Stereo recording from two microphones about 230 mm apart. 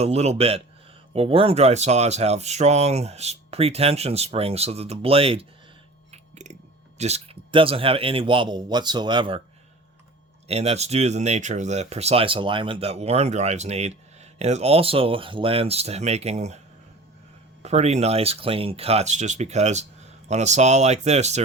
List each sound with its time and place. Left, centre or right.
0.0 s speech: right
6.1 s a sound: right
7.0 s speech: right
10.5 s speech: right
17.6 s speech: right